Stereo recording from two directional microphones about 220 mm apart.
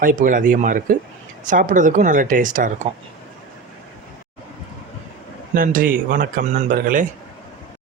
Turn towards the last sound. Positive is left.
turn(degrees=-35)  # may be behind; listen again after turning